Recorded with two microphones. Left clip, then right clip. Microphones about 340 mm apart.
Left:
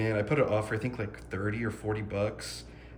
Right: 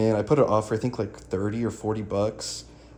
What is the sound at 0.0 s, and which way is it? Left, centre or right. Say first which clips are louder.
A man's voice: right 7 dB; centre.